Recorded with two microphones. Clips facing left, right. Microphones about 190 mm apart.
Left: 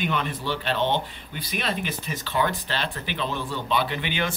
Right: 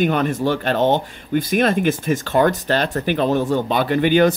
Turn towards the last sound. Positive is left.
turn(degrees=-45)  # may be behind; listen again after turning